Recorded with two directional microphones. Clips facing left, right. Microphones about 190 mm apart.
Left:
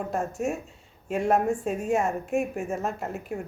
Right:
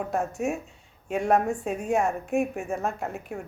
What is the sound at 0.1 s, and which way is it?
Speech, centre (ahead or behind).